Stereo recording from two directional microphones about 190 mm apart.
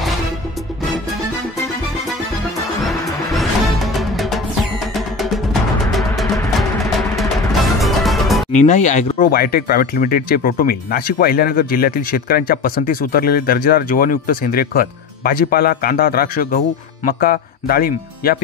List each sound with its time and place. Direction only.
3.3 s music: centre (ahead or behind)
8.5 s speech: 40° left (ahead or behind)